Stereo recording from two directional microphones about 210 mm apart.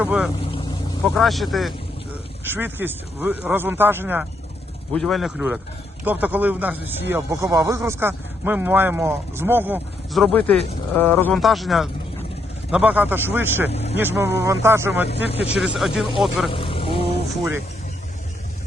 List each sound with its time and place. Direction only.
0.0 s speech: 5° right (ahead or behind)
13.7 s speech: 30° left (ahead or behind)
14.0 s speech: 10° right (ahead or behind)
16.5 s vehicle: 25° left (ahead or behind)